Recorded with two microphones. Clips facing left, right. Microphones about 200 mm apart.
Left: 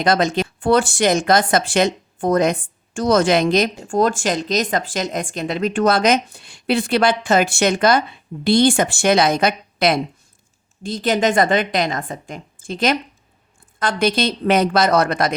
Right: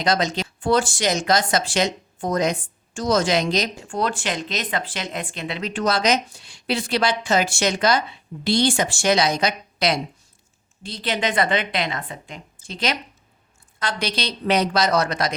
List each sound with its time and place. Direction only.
0.0 s speech: 55° left (ahead or behind)